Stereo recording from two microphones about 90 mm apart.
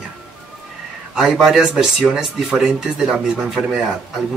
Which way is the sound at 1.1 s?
5° right (ahead or behind).